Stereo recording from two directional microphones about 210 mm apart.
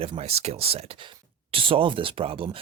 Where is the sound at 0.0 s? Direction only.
30° right (ahead or behind).